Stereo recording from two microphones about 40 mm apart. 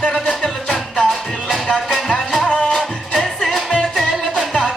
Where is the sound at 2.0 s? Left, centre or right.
Centre.